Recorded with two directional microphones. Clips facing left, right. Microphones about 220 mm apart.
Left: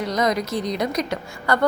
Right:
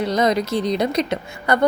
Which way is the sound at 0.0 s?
30° right (ahead or behind).